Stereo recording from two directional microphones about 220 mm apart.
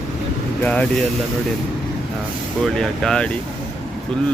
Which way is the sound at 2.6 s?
Centre (ahead or behind).